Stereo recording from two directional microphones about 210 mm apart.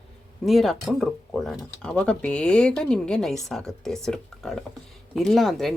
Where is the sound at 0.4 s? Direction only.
Centre (ahead or behind).